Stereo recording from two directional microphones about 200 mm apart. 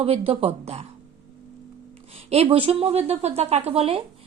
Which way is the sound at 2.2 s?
30° right (ahead or behind).